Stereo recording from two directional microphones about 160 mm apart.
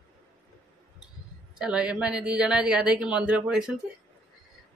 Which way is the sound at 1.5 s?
5° right (ahead or behind).